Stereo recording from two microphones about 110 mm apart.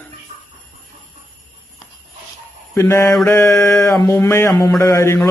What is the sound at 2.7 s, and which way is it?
Speech, 25° left (ahead or behind).